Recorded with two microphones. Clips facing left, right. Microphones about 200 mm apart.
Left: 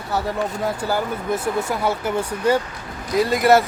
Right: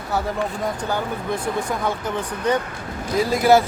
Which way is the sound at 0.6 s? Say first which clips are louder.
Left 2 dB; 5° left (ahead or behind).